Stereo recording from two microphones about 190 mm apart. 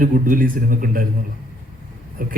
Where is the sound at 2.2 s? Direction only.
50° right (ahead or behind).